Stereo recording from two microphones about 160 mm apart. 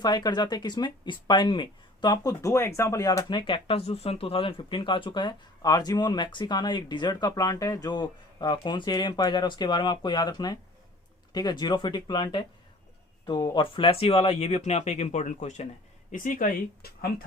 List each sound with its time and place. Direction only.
0.0 s speech: 25° left (ahead or behind); by 17.1 s 65° left (ahead or behind)